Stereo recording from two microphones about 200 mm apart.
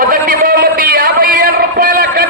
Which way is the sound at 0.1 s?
45° right (ahead or behind).